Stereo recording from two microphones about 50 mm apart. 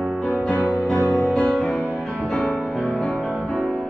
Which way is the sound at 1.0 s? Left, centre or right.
Left.